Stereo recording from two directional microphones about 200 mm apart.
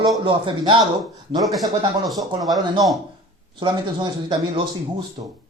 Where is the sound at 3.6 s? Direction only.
25° right (ahead or behind).